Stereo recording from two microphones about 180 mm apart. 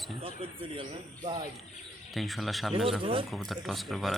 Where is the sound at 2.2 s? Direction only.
Centre (ahead or behind).